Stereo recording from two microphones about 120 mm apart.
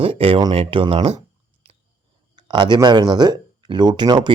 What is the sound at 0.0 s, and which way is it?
Speech, 50° right (ahead or behind).